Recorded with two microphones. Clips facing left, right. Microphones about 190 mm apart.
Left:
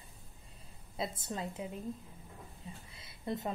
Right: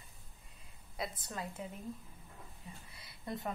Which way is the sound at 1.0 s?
25° left (ahead or behind).